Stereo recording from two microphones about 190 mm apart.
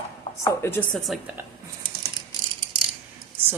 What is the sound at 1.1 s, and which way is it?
Speech, centre (ahead or behind).